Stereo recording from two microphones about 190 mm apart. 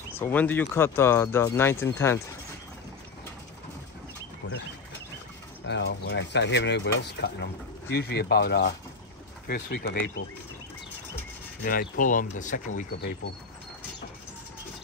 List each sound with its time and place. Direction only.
0.2 s speech: 10° left (ahead or behind)
4.4 s bird: 70° left (ahead or behind)
5.7 s speech: 70° left (ahead or behind)
11.6 s speech: 50° left (ahead or behind)
12.9 s speech: 60° left (ahead or behind)